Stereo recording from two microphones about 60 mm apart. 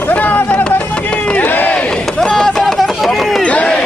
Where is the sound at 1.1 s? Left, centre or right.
Left.